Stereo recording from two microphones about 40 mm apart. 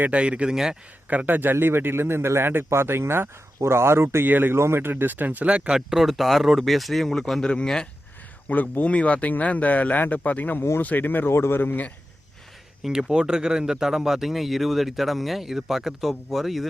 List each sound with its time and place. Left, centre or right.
0.1 s speech: right
0.5 s speech: centre
1.3 s speech: right
4.3 s speech: right
4.5 s speech: right
5.1 s speech: right
5.5 s speech: right
6.0 s speech: centre
7.4 s speech: centre
8.4 s speech: left
11.3 s speech: left
11.6 s speech: left
12.9 s speech: centre